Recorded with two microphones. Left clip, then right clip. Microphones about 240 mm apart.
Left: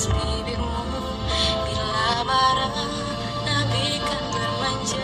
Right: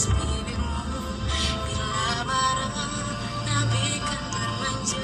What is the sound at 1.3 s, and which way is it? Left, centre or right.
Music, left.